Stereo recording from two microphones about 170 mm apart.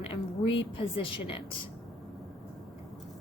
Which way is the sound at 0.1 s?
30° left (ahead or behind).